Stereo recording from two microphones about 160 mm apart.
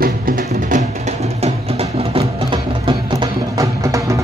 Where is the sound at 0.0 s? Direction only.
65° right (ahead or behind).